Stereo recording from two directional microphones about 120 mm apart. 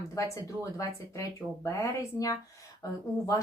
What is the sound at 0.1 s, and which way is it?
Speech, 25° left (ahead or behind).